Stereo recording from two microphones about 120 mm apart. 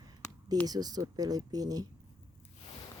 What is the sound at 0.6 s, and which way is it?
Speech, 35° right (ahead or behind).